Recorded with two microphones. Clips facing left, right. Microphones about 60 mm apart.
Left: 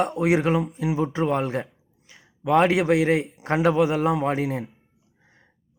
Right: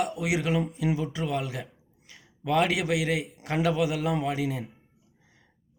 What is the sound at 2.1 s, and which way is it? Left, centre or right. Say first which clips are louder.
A man's voice: left 6 dB; left.